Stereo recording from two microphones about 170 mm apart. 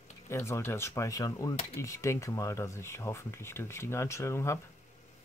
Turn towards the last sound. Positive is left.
turn(degrees=15)  # may be behind; listen again after turning